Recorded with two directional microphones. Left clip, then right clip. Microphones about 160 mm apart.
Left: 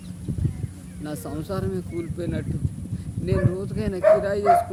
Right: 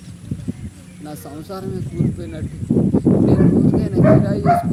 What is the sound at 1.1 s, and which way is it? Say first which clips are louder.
Speech: even; 15° left (ahead or behind).